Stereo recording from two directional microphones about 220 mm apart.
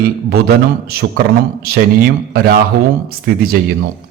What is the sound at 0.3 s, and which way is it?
A man's voice, 45° right (ahead or behind).